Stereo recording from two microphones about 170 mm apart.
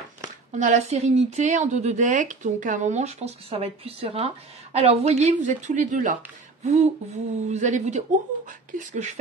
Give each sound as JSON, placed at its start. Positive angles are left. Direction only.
{"t": 0.6, "sound": "speech", "side_deg": -45}
{"t": 6.6, "sound": "a sound", "side_deg": -40}
{"t": 7.4, "sound": "speech", "side_deg": -45}